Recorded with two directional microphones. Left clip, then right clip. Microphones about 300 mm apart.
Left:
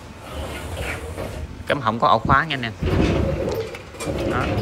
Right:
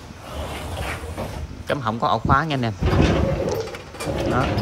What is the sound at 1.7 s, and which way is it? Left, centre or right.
Speech, centre.